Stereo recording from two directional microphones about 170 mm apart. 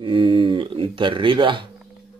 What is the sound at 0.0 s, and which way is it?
Speech, 30° right (ahead or behind).